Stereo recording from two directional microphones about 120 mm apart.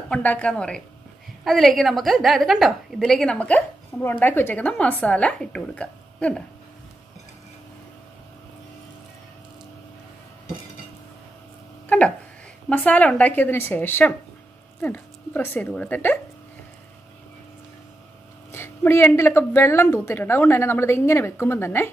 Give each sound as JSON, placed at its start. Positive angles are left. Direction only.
{"t": 0.1, "sound": "a woman's voice", "side_deg": 10}
{"t": 12.6, "sound": "a woman's voice", "side_deg": 15}
{"t": 18.5, "sound": "a woman's voice", "side_deg": 20}